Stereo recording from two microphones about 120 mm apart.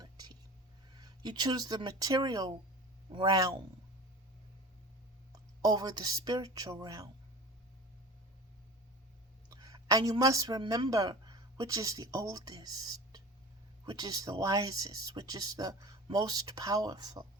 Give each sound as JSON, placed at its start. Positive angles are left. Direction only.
{"t": 0.0, "sound": "whispering", "side_deg": -35}
{"t": 0.9, "sound": "speech", "side_deg": -35}
{"t": 5.3, "sound": "speech", "side_deg": -35}
{"t": 9.5, "sound": "chicken", "side_deg": -30}
{"t": 10.7, "sound": "speech", "side_deg": -30}